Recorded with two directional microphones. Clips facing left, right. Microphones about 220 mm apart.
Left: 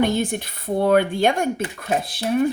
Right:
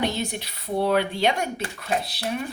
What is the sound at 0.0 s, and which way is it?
Speech, 50° left (ahead or behind).